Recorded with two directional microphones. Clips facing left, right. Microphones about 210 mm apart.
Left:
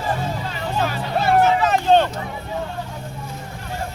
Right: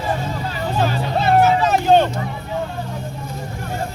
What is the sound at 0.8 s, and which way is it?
Music, 30° right (ahead or behind).